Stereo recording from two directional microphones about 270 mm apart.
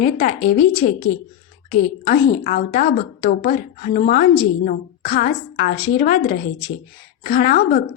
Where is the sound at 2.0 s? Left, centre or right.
Left.